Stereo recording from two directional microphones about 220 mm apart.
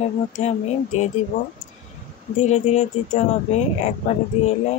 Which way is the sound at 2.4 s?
30° left (ahead or behind).